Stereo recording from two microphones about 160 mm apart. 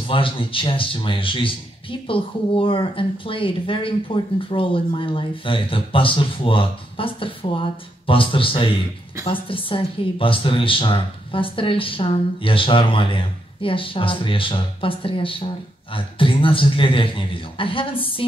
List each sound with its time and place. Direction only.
0.1 s speech: 35° left (ahead or behind)